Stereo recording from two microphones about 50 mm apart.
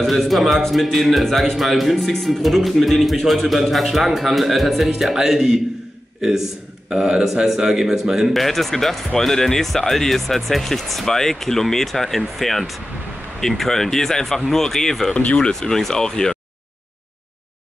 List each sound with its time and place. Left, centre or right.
0.0 s a man's voice: centre
6.9 s speech: centre
8.3 s a man's voice: centre
15.1 s speech: left
15.7 s speech: centre